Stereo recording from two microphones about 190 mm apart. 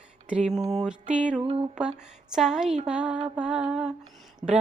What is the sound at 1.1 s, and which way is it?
Music, 5° right (ahead or behind).